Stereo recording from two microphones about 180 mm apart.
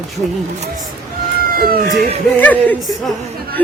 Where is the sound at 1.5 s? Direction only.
55° right (ahead or behind).